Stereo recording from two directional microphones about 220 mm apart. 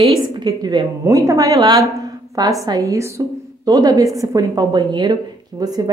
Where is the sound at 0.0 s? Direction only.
20° right (ahead or behind).